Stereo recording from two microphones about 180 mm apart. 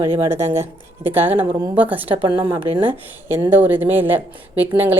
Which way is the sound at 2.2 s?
30° right (ahead or behind).